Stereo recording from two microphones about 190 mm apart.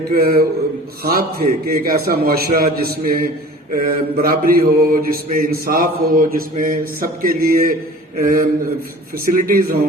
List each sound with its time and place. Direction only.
0.1 s mantra: 50° right (ahead or behind)